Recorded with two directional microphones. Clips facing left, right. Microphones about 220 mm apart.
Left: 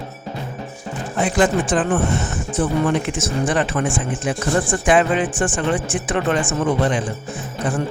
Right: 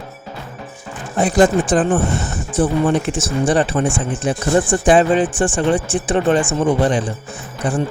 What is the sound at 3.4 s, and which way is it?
Speech, 30° right (ahead or behind).